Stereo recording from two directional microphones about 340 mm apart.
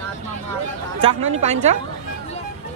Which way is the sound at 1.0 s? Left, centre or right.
Centre.